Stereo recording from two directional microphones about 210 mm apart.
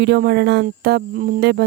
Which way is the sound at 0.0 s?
50° right (ahead or behind).